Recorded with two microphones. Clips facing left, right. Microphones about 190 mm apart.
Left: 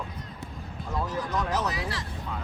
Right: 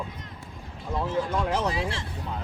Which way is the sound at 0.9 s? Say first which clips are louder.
Right 3 dB; 25° right (ahead or behind).